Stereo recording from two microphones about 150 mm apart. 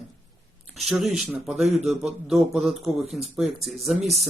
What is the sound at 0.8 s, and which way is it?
A man's voice, centre (ahead or behind).